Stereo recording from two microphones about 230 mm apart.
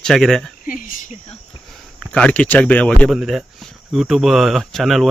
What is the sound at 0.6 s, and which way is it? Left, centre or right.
Speech, left.